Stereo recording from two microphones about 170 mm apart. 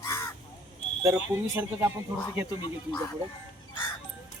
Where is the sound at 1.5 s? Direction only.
15° right (ahead or behind).